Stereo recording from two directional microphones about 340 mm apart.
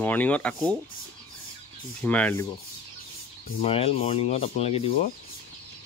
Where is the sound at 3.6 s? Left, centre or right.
Centre.